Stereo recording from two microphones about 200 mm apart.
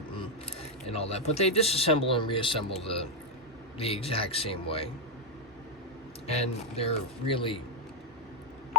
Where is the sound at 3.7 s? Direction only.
30° left (ahead or behind).